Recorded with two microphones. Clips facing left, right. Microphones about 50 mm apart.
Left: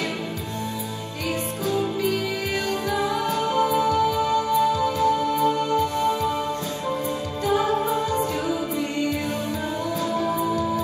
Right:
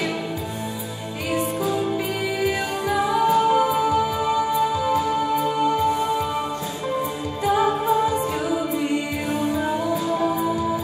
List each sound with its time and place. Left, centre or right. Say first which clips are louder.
2.9 s music: right 7 dB; centre
7.4 s music: right 2 dB; centre
10.1 s music: right 2 dB; centre